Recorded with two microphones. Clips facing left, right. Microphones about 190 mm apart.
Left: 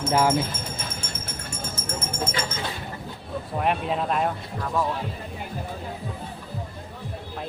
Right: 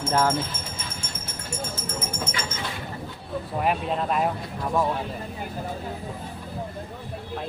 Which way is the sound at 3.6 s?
Centre (ahead or behind).